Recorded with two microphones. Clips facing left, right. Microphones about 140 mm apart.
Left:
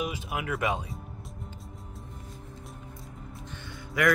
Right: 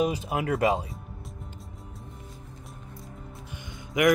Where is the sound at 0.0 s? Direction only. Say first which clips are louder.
Right 6 dB; 35° right (ahead or behind).